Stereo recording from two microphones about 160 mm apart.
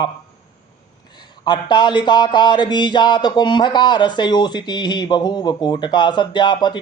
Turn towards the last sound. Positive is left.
turn(degrees=30)  # may be behind; listen again after turning